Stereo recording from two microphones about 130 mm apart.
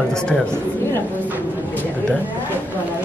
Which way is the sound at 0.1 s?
5° left (ahead or behind).